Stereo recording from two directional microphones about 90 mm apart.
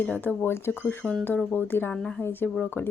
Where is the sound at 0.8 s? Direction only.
10° left (ahead or behind).